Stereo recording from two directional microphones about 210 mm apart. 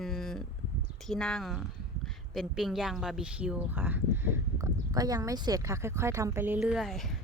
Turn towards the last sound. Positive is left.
turn(degrees=0)  # may be behind; listen again after turning